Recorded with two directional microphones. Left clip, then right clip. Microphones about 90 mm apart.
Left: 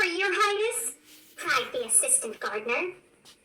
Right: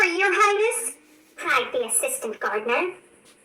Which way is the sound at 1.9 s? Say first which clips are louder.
Right 3 dB; 40° right (ahead or behind).